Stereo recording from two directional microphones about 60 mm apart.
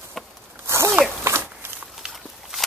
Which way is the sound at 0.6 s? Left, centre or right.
Right.